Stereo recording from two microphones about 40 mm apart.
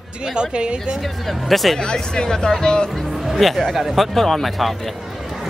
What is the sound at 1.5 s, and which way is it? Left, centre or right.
Speech, centre.